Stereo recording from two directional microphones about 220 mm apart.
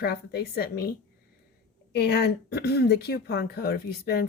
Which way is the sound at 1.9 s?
50° left (ahead or behind).